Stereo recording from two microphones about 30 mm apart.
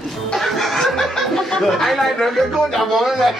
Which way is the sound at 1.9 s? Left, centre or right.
Centre.